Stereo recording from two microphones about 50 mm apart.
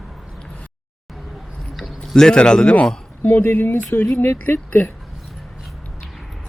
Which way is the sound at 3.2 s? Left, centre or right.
Left.